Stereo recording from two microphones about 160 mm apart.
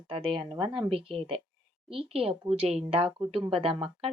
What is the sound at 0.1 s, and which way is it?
A woman's voice, 35° right (ahead or behind).